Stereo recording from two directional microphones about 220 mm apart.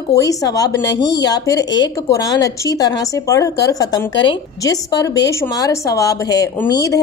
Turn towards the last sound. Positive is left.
turn(degrees=15)  # may be behind; listen again after turning